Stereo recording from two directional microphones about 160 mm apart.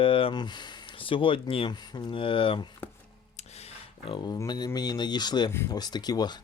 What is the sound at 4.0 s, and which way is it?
Speech, 30° left (ahead or behind).